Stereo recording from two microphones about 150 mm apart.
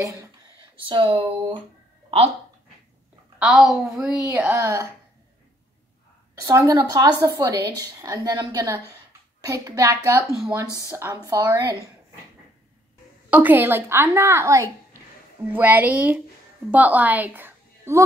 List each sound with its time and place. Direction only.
0.8 s speech: 35° right (ahead or behind)
2.0 s a sound: 40° right (ahead or behind)
3.3 s a woman's voice: 5° right (ahead or behind); by 4.8 s 20° right (ahead or behind)
6.4 s a woman's voice: 25° right (ahead or behind)
13.3 s a woman's voice: 10° right (ahead or behind)